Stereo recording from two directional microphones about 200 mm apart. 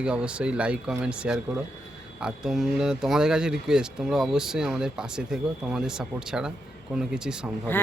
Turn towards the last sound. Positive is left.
turn(degrees=-5)  # may be behind; listen again after turning